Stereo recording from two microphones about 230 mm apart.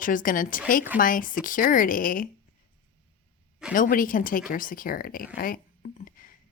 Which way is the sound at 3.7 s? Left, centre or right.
Left.